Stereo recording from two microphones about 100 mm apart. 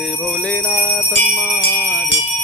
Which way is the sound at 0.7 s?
20° left (ahead or behind).